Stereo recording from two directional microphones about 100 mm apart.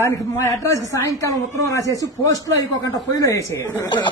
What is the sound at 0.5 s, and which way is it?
Speech, 35° left (ahead or behind).